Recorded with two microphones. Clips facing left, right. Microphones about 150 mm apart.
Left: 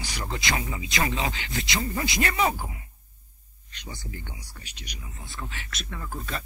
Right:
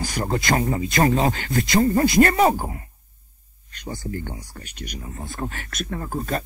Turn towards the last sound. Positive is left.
turn(degrees=-45)  # may be behind; listen again after turning